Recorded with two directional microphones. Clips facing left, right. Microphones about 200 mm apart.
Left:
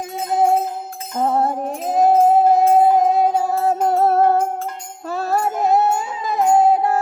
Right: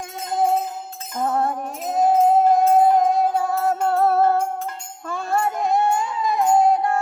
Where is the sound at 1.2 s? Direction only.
30° left (ahead or behind).